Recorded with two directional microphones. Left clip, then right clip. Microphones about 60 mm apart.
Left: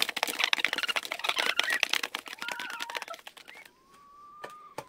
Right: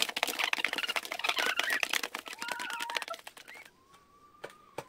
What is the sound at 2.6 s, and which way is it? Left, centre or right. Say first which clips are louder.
Bird: right 1 dB; left.